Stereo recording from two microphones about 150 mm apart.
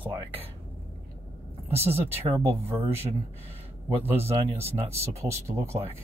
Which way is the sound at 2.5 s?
40° right (ahead or behind).